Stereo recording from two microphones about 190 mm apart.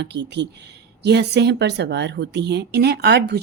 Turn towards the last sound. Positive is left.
turn(degrees=-60)  # may be behind; listen again after turning